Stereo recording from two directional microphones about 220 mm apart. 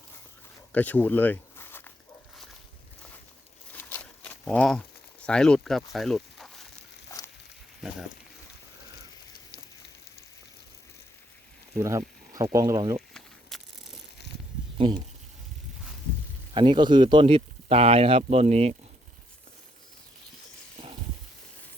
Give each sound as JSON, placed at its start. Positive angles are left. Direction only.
{"t": 0.7, "sound": "speech", "side_deg": 10}
{"t": 3.8, "sound": "a sound", "side_deg": 10}
{"t": 5.2, "sound": "speech", "side_deg": 5}
{"t": 7.1, "sound": "a sound", "side_deg": 15}
{"t": 7.8, "sound": "speech", "side_deg": 0}
{"t": 11.8, "sound": "a sound", "side_deg": -15}
{"t": 12.5, "sound": "speech", "side_deg": -15}
{"t": 13.5, "sound": "crushing", "side_deg": 0}
{"t": 16.6, "sound": "speech", "side_deg": -20}